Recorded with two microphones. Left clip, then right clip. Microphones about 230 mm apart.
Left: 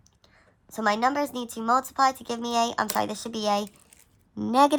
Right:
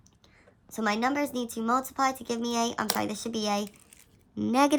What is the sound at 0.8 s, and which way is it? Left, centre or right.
Speech, centre.